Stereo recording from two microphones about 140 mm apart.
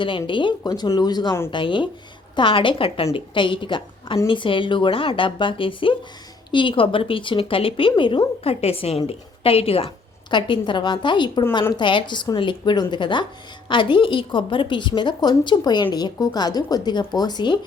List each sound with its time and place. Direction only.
0.3 s a woman's voice: 35° left (ahead or behind)